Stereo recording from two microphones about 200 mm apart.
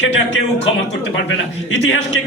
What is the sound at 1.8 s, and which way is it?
Speech, 65° left (ahead or behind).